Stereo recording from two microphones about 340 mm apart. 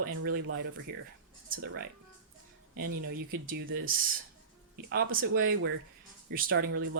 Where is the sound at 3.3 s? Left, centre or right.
Right.